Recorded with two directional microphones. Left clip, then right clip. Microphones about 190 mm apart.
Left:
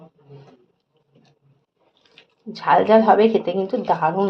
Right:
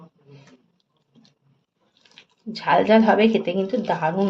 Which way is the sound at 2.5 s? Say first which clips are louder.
Left 2 dB; 5° right (ahead or behind).